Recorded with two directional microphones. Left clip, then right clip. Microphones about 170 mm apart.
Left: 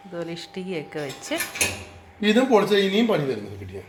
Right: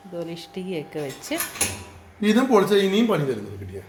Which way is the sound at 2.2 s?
30° right (ahead or behind).